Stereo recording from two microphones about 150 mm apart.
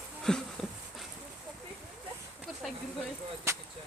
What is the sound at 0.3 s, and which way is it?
Speech, 5° left (ahead or behind).